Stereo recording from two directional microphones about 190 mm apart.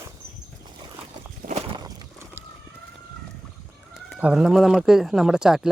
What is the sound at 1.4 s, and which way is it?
Walk, 40° right (ahead or behind).